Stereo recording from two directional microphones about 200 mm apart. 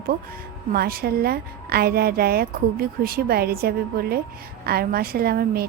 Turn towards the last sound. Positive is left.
turn(degrees=-50)  # may be behind; listen again after turning